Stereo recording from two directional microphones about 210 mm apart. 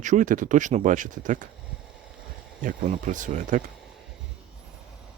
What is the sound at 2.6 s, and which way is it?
Speech, 40° right (ahead or behind).